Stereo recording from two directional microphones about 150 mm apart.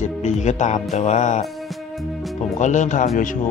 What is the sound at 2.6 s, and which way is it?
Speech, 55° left (ahead or behind).